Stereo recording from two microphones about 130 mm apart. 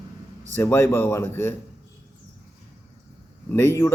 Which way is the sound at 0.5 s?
15° left (ahead or behind).